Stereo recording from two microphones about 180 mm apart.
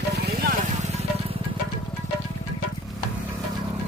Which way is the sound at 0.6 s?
40° right (ahead or behind).